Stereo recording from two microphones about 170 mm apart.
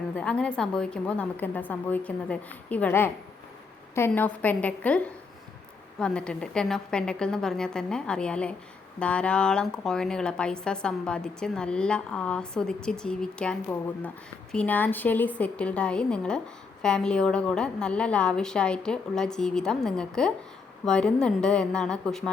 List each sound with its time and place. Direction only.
0.2 s a woman's voice: 5° left (ahead or behind)